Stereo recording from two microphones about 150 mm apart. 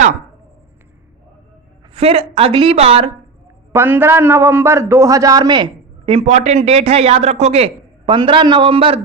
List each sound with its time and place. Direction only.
1.9 s a man's voice: 40° right (ahead or behind)
3.7 s a man's voice: 15° right (ahead or behind); by 9.0 s 35° right (ahead or behind)